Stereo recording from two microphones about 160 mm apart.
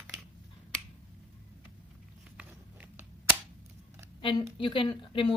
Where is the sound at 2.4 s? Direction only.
10° right (ahead or behind).